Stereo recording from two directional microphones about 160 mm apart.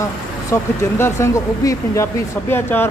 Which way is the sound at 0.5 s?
15° left (ahead or behind).